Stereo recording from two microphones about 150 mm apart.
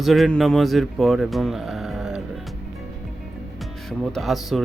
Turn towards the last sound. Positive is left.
turn(degrees=0)  # may be behind; listen again after turning